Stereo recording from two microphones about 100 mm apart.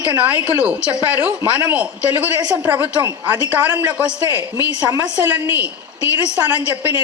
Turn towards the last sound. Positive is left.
turn(degrees=-20)  # may be behind; listen again after turning